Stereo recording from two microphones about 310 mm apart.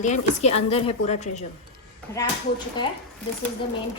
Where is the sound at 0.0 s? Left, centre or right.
Left.